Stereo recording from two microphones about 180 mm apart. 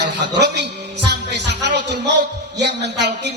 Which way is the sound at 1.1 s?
75° right (ahead or behind).